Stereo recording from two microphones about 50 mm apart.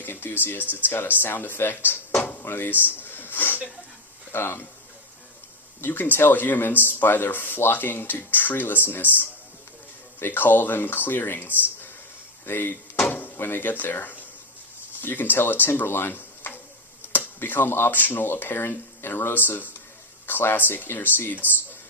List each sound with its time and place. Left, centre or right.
0.0 s speech: left
3.0 s chuckle: left
4.3 s speech: left
5.8 s speech: left
10.2 s speech: left
13.1 s drawer open or close: left
13.3 s speech: left